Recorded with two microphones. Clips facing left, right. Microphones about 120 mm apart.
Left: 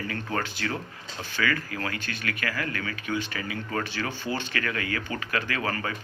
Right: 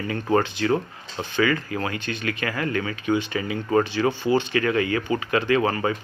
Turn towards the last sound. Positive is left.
turn(degrees=-25)  # may be behind; listen again after turning